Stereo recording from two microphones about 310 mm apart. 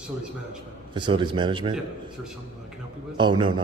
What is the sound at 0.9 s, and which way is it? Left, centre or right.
Speech, centre.